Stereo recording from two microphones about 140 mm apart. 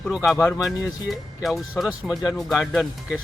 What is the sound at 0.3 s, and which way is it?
Speech, 5° right (ahead or behind).